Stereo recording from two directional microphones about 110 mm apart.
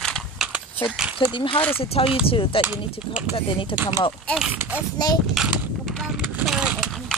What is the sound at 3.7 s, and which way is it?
Speech, 35° left (ahead or behind).